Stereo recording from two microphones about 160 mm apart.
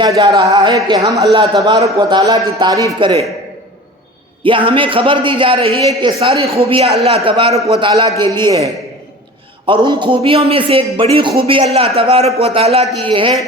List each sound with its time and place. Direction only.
0.2 s a man's voice: 20° right (ahead or behind)
4.4 s a man's voice: 30° right (ahead or behind)
9.6 s speech: 30° right (ahead or behind)